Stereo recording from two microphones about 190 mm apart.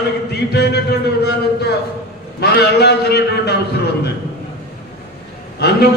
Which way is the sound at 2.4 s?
60° left (ahead or behind).